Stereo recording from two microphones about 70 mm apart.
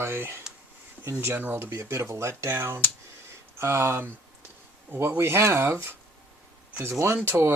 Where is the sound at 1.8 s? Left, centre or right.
Right.